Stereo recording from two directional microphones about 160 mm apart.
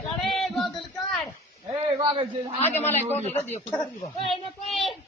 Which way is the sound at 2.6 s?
15° left (ahead or behind).